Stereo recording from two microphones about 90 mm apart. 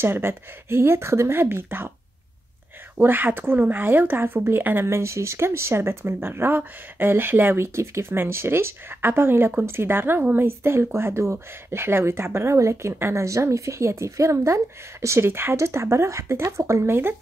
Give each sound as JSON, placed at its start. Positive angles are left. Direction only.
{"t": 0.0, "sound": "speech", "side_deg": -25}
{"t": 3.0, "sound": "speech", "side_deg": -20}